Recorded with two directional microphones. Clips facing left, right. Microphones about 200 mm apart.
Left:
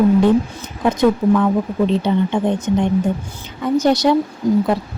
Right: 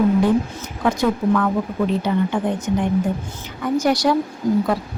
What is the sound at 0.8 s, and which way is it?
A woman's voice, 20° left (ahead or behind).